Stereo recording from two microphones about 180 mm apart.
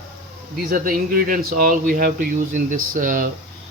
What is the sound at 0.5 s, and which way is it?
Speech, 55° right (ahead or behind).